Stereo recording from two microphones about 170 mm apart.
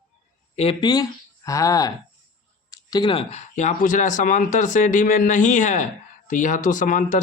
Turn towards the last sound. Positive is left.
turn(degrees=50)  # may be behind; listen again after turning